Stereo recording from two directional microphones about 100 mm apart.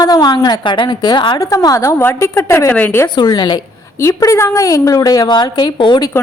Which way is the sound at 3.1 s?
45° left (ahead or behind).